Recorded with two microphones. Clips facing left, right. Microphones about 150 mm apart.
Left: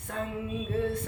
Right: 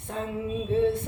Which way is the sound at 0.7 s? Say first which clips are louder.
Right 7 dB; 25° right (ahead or behind).